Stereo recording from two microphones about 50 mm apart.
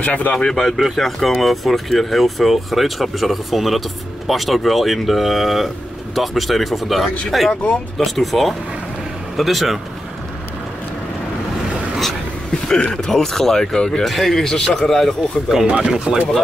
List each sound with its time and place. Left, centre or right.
0.0 s speech: left
0.5 s speech: centre
12.6 s speech: centre
14.0 s speech: centre
15.6 s speech: centre